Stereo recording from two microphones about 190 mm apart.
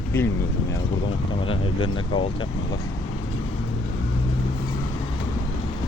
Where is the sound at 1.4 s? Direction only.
25° left (ahead or behind).